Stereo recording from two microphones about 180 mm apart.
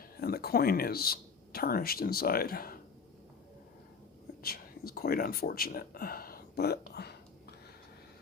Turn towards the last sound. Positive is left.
turn(degrees=65)  # may be behind; listen again after turning